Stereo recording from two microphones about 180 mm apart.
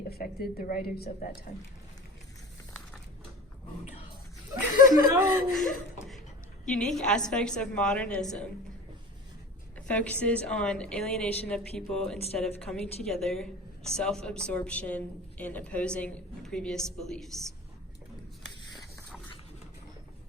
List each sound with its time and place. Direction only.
0.1 s speech: 55° left (ahead or behind)
4.7 s speech: 50° left (ahead or behind)
5.5 s chuckle: centre (ahead or behind)
6.7 s a woman's voice: 5° left (ahead or behind)
9.7 s a woman's voice: 5° left (ahead or behind)